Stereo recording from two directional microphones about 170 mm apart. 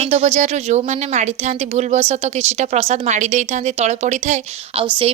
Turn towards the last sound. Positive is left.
turn(degrees=-30)  # may be behind; listen again after turning